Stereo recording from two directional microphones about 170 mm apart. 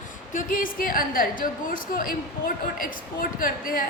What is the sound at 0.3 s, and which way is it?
A woman's voice, 55° left (ahead or behind).